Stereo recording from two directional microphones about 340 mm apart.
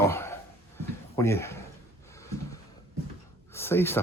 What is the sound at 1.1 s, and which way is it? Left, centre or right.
Speech, centre.